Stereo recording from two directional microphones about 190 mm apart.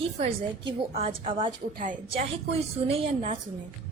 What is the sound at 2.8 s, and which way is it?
Speech, 30° right (ahead or behind).